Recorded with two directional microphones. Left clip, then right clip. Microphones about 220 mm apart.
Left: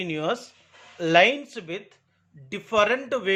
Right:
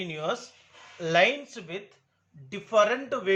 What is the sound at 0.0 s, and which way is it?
Speech, 40° left (ahead or behind).